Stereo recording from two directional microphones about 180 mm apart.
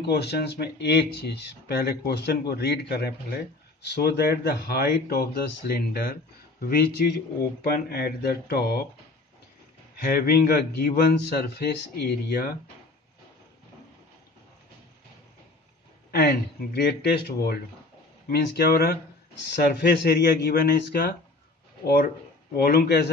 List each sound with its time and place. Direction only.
0.0 s speech: 65° left (ahead or behind)
7.6 s speech: 60° left (ahead or behind)
9.9 s speech: 55° left (ahead or behind)
16.1 s speech: 60° left (ahead or behind)
18.3 s speech: 60° left (ahead or behind)